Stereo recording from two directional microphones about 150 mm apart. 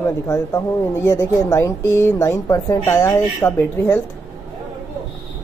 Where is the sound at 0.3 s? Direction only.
20° left (ahead or behind).